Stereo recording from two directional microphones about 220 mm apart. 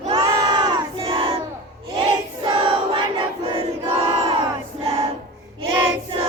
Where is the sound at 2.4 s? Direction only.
25° right (ahead or behind).